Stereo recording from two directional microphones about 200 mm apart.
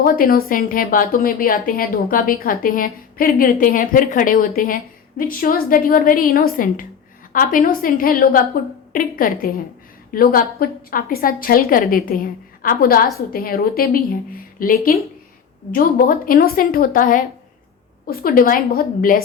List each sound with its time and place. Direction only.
0.0 s a woman's voice: 45° left (ahead or behind)